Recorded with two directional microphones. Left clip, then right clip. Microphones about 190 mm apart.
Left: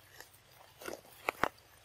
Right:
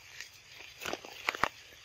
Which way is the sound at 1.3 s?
20° left (ahead or behind).